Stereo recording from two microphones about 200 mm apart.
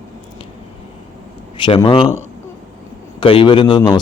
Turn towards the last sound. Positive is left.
turn(degrees=25)  # may be behind; listen again after turning